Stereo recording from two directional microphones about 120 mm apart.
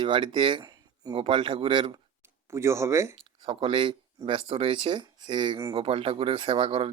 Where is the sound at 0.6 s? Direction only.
30° right (ahead or behind).